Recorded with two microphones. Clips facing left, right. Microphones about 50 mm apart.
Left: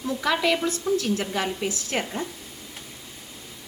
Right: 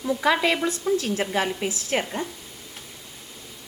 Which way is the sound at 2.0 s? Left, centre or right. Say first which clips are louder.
Right 1 dB; centre.